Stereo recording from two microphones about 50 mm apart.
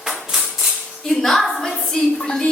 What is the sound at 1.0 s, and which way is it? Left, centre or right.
A woman's voice, centre.